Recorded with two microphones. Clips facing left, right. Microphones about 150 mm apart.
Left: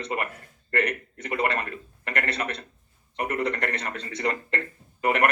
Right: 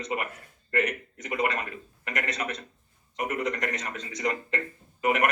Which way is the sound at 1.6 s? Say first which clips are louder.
Left 2 dB; 10° right (ahead or behind).